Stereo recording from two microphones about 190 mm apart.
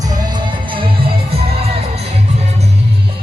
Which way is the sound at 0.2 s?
25° right (ahead or behind).